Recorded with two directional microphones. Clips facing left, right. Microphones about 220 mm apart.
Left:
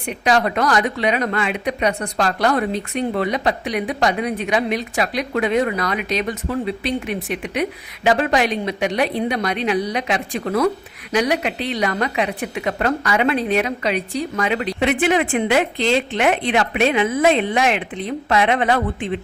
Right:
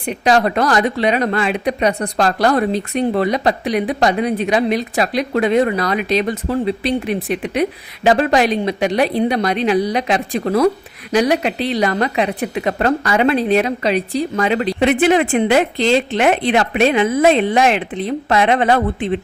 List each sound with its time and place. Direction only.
0.0 s speech: 35° right (ahead or behind)